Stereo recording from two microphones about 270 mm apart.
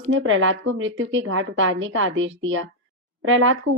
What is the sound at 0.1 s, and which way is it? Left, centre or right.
Speech, right.